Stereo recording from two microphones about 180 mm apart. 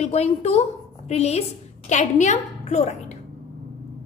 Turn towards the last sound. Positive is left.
turn(degrees=40)  # may be behind; listen again after turning